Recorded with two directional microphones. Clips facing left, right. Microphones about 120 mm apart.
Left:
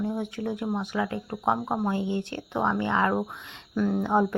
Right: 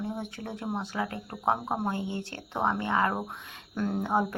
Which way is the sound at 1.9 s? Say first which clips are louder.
Left 5 dB; 20° left (ahead or behind).